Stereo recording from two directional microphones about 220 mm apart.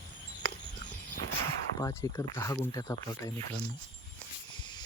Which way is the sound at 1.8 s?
15° left (ahead or behind).